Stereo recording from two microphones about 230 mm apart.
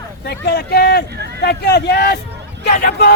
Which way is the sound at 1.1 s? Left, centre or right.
Right.